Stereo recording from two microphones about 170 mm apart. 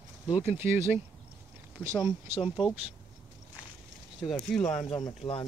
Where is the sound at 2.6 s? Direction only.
30° left (ahead or behind).